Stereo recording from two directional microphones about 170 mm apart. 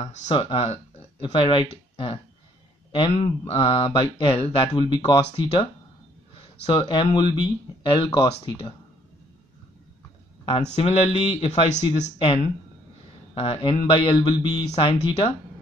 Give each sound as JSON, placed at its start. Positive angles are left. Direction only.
{"t": 0.0, "sound": "speech", "side_deg": 45}
{"t": 0.3, "sound": "speech", "side_deg": 30}
{"t": 6.7, "sound": "speech", "side_deg": 25}
{"t": 10.7, "sound": "speech", "side_deg": 40}